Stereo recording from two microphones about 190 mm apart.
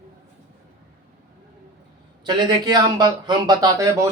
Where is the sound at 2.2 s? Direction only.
20° right (ahead or behind).